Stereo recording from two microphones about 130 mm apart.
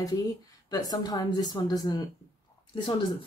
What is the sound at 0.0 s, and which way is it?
Speech, 30° left (ahead or behind).